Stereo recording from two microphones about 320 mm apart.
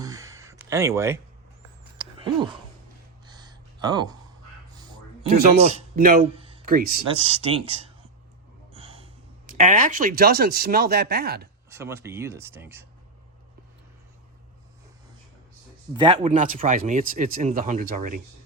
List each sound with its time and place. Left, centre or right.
0.0 s a sound: centre
5.3 s a man's voice: centre
8.7 s a sound: centre
9.5 s speech: right
11.7 s speech: centre
15.9 s speech: centre